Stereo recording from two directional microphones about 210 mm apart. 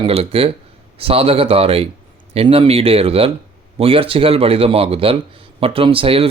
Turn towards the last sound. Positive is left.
turn(degrees=-25)  # may be behind; listen again after turning